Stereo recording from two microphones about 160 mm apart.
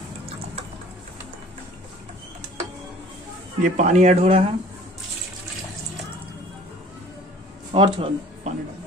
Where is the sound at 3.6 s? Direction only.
50° right (ahead or behind).